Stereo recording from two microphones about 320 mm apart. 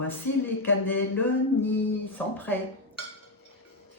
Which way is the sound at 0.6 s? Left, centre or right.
Left.